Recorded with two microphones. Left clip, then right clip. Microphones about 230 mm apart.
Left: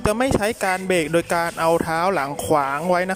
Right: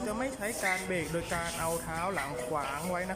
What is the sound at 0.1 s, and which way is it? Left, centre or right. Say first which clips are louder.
Speech: left 16 dB; left.